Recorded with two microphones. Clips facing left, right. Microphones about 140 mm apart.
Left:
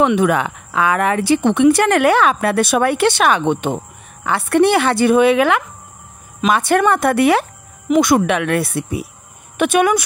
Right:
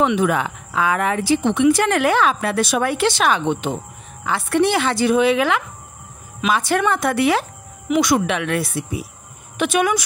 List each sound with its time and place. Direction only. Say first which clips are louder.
0.0 s speech: left 3 dB; 65° left (ahead or behind)